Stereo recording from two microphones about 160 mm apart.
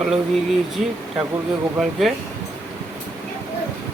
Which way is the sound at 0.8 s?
50° right (ahead or behind).